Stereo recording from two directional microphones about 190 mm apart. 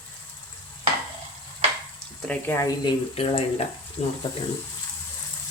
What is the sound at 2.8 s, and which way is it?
Speech, 25° left (ahead or behind).